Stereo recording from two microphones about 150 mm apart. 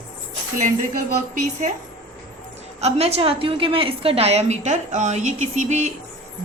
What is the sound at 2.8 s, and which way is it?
A woman's voice, 45° right (ahead or behind).